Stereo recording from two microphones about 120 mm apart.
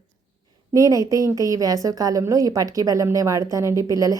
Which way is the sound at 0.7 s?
30° right (ahead or behind).